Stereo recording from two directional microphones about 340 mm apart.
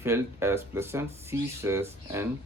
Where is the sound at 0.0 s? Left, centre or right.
Centre.